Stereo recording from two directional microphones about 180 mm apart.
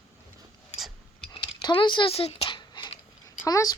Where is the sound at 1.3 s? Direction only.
25° left (ahead or behind).